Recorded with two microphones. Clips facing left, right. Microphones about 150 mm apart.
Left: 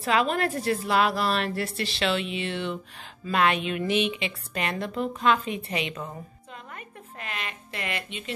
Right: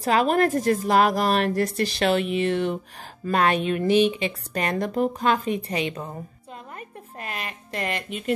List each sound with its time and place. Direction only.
0.0 s a woman's voice: 40° right (ahead or behind)
7.2 s a woman's voice: 40° right (ahead or behind)